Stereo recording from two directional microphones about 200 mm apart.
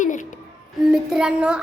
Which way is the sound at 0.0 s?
40° left (ahead or behind).